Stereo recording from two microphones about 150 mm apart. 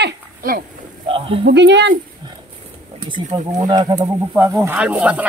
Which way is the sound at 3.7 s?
25° right (ahead or behind).